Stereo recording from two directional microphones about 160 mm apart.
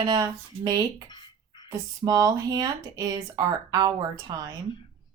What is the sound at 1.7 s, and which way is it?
Speech, 20° right (ahead or behind).